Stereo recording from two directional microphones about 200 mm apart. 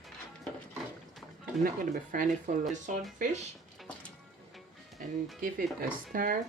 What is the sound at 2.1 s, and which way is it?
Speech, 40° right (ahead or behind).